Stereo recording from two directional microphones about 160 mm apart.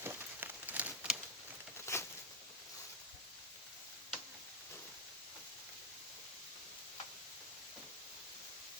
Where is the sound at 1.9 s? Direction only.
20° left (ahead or behind).